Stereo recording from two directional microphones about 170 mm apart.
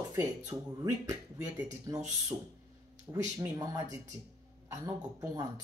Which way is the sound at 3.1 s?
20° right (ahead or behind).